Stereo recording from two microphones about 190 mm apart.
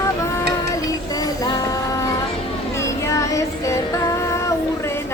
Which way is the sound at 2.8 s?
15° left (ahead or behind).